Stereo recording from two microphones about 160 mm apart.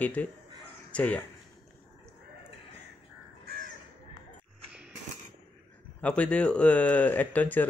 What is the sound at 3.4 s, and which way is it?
Crow, 75° right (ahead or behind).